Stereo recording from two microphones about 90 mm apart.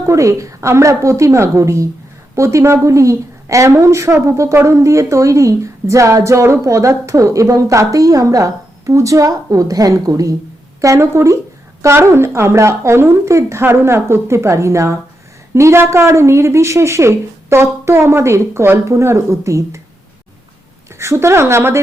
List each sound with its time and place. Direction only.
0.0 s a woman's voice: 35° right (ahead or behind)
21.0 s speech: 30° right (ahead or behind)